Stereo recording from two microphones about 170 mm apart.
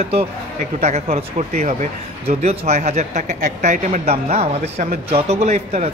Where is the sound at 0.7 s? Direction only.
40° right (ahead or behind).